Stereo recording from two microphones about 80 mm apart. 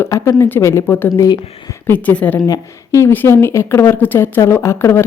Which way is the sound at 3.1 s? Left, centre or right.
Left.